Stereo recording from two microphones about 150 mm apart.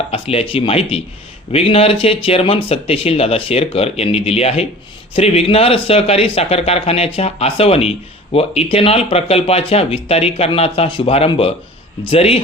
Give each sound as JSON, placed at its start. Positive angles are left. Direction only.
{"t": 0.1, "sound": "speech", "side_deg": 40}